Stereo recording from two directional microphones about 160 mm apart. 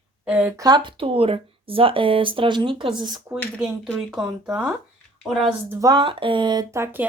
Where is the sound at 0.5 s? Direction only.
25° right (ahead or behind).